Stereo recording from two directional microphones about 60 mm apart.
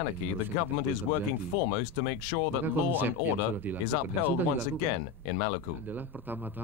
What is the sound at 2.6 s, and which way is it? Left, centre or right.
Speech, right.